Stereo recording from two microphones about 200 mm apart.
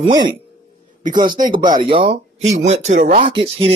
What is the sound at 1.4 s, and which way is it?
Speech, 45° right (ahead or behind).